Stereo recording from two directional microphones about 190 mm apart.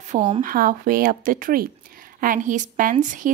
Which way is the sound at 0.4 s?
50° right (ahead or behind).